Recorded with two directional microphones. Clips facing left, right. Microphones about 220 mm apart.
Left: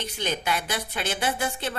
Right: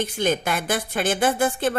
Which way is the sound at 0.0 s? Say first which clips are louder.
Right 7 dB; 50° right (ahead or behind).